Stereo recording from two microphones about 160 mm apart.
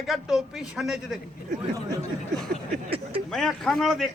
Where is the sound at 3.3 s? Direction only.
Centre (ahead or behind).